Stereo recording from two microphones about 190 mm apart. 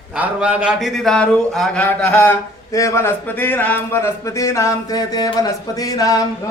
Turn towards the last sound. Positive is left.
turn(degrees=20)  # may be behind; listen again after turning